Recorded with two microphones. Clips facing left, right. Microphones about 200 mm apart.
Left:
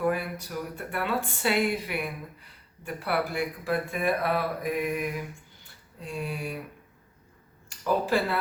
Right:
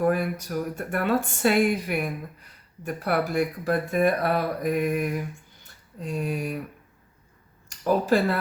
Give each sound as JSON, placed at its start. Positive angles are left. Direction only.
{"t": 0.0, "sound": "speech", "side_deg": -45}
{"t": 7.7, "sound": "speech", "side_deg": -45}